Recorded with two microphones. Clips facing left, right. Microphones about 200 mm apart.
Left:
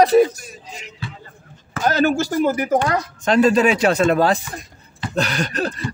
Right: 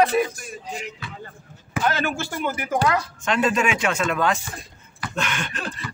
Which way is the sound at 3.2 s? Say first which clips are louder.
Left 8 dB; 35° left (ahead or behind).